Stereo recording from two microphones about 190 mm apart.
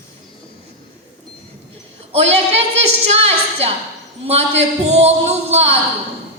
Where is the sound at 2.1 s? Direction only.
30° right (ahead or behind).